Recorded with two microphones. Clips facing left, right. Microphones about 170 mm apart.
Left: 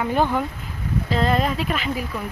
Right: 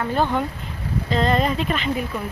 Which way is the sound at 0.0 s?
10° left (ahead or behind).